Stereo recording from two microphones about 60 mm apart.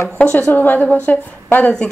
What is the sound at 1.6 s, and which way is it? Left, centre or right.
Speech, centre.